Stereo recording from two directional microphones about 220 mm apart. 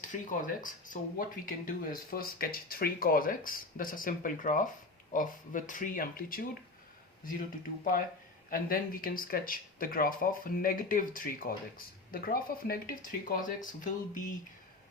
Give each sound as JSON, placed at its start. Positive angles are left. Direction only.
{"t": 0.0, "sound": "speech", "side_deg": 35}
{"t": 8.4, "sound": "speech", "side_deg": 40}